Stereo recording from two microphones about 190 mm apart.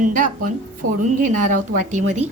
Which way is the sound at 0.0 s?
45° right (ahead or behind).